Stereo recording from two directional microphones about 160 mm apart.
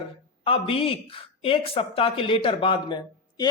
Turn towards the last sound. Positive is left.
turn(degrees=30)  # may be behind; listen again after turning